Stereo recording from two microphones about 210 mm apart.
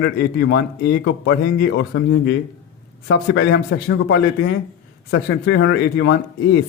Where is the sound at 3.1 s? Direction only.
60° left (ahead or behind).